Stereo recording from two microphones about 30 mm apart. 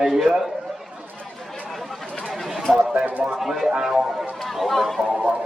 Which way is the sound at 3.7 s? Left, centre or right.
Right.